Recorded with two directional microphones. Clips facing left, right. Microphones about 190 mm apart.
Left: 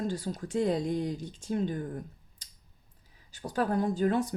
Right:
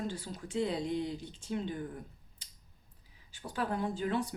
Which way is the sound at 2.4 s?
40° left (ahead or behind).